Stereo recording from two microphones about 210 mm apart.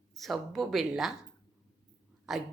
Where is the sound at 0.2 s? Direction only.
Centre (ahead or behind).